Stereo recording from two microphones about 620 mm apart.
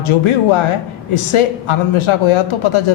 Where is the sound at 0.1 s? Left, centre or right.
Left.